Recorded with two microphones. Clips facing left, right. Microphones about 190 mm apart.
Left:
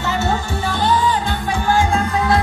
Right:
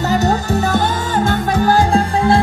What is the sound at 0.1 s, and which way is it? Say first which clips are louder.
Music: right 5 dB; 40° right (ahead or behind).